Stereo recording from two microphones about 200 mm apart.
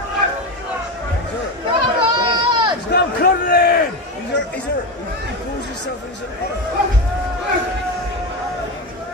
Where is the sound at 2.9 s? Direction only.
50° left (ahead or behind).